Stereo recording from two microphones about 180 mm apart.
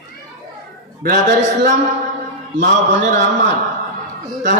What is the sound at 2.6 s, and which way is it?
Speech, 75° right (ahead or behind).